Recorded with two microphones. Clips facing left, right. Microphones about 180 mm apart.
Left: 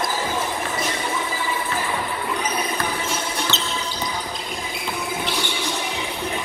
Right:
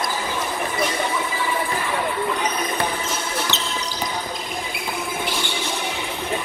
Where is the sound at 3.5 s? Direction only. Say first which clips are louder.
Even; 15° right (ahead or behind).